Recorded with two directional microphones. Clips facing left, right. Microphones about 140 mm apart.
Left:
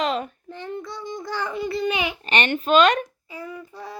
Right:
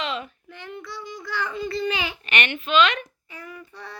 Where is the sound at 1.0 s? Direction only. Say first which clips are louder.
Left 3 dB; 45° left (ahead or behind).